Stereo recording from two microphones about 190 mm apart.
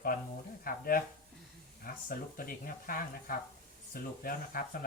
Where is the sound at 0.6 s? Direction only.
50° left (ahead or behind).